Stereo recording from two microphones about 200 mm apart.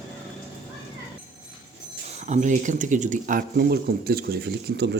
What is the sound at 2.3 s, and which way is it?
Speech, 35° right (ahead or behind).